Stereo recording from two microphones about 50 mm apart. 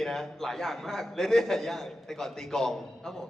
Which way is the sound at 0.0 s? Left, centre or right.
Centre.